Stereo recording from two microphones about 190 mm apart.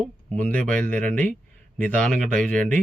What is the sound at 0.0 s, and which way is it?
Speech, 5° left (ahead or behind).